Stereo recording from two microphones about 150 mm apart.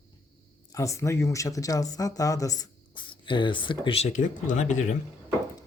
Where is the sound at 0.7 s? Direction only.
20° left (ahead or behind); by 5.0 s 55° left (ahead or behind).